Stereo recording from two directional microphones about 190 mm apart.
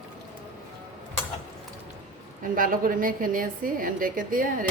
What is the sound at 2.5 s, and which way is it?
Dishes, 45° right (ahead or behind).